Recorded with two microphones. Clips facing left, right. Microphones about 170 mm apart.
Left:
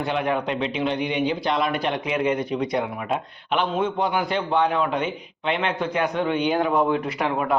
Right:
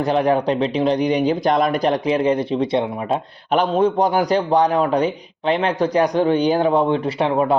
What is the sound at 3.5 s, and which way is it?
A man's voice, 40° right (ahead or behind).